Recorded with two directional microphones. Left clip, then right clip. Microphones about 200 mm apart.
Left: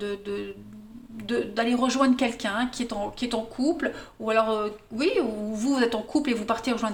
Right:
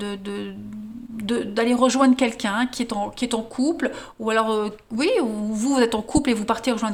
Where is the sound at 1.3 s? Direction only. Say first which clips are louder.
Right 4 dB; 45° right (ahead or behind).